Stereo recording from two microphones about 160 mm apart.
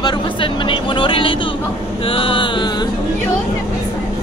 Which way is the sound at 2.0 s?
35° left (ahead or behind).